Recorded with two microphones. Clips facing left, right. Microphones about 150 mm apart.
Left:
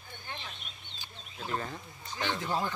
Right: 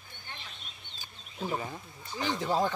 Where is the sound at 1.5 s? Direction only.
10° right (ahead or behind).